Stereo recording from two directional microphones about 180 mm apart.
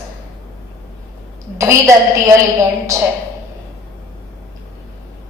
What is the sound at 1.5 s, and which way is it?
Speech, 15° right (ahead or behind).